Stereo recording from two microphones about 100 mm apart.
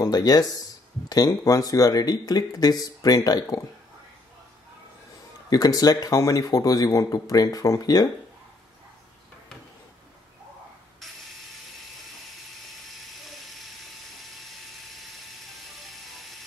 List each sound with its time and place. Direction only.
0.0 s speech: 40° left (ahead or behind)
5.5 s speech: 40° left (ahead or behind)
14.4 s helicopter: centre (ahead or behind)
15.8 s mechanisms: centre (ahead or behind)